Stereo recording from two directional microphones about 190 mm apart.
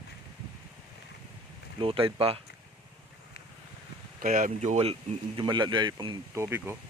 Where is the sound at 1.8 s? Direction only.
30° right (ahead or behind).